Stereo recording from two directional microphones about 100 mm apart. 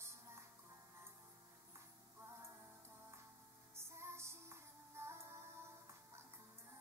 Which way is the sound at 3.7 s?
25° right (ahead or behind).